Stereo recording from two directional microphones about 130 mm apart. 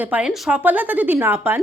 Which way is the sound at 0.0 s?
10° right (ahead or behind).